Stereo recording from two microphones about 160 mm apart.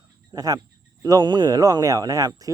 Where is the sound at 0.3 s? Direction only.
25° right (ahead or behind).